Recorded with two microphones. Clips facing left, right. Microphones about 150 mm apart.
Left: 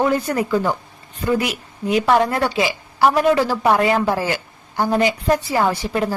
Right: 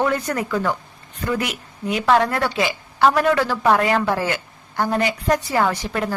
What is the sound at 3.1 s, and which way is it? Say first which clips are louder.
Speech: left 2 dB; 15° left (ahead or behind).